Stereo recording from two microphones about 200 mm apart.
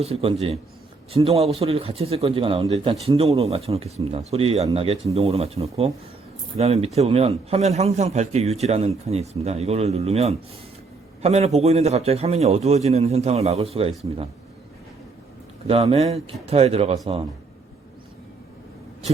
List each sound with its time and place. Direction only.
0.0 s a man's voice: 30° right (ahead or behind)
15.6 s a man's voice: 30° right (ahead or behind)